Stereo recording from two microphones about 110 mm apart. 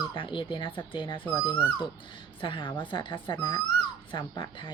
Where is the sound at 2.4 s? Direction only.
50° left (ahead or behind).